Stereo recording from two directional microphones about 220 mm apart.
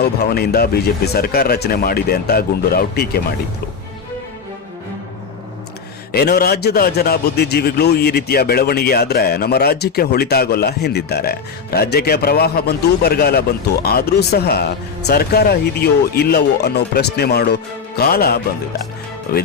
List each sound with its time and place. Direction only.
0.0 s a man's voice: 45° left (ahead or behind)
6.1 s a man's voice: 45° left (ahead or behind)